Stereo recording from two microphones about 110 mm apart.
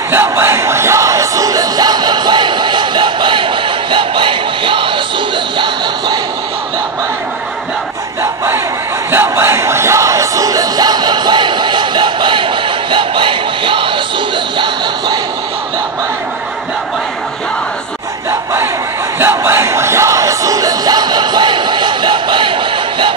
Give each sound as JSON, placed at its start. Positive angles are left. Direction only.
{"t": 0.1, "sound": "music", "side_deg": -20}
{"t": 9.1, "sound": "crowd", "side_deg": -20}
{"t": 18.3, "sound": "a sound", "side_deg": -25}
{"t": 19.1, "sound": "music", "side_deg": -20}